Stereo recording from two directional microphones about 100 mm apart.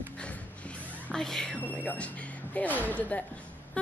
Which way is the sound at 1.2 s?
5° left (ahead or behind).